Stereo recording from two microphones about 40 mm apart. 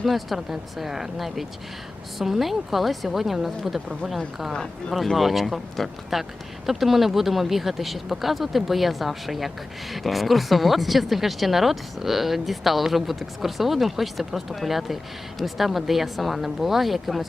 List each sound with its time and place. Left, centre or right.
0.0 s speech: centre
4.5 s speech: centre
5.1 s speech: centre